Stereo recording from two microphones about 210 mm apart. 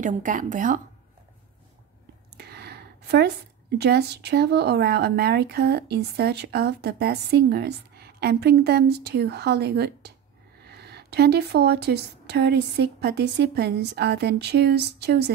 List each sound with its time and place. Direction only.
0.0 s a woman's voice: 40° right (ahead or behind)
2.3 s a woman's voice: 50° right (ahead or behind)